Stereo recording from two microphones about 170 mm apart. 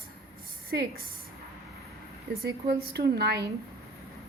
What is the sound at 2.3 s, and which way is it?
A woman's voice, 65° right (ahead or behind).